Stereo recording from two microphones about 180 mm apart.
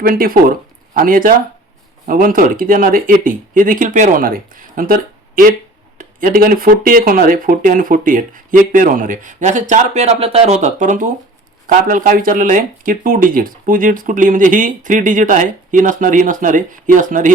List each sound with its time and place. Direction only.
0.0 s speech: 55° right (ahead or behind)